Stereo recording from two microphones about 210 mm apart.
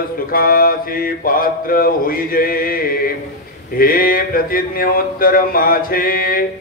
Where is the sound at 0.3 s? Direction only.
45° left (ahead or behind).